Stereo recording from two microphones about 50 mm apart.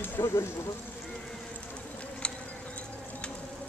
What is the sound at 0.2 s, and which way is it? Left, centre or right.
Speech, left.